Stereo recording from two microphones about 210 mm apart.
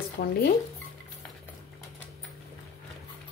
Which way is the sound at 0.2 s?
50° left (ahead or behind).